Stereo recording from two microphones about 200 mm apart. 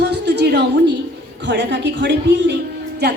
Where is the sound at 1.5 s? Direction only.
60° right (ahead or behind).